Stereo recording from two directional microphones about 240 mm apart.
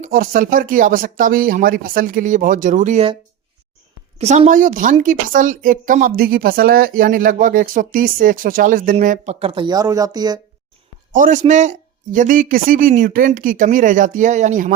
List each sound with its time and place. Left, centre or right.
0.0 s a woman's voice: right
4.2 s a woman's voice: right
11.1 s a woman's voice: right